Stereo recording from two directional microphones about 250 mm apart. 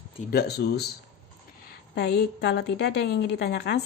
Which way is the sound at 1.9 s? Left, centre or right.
Left.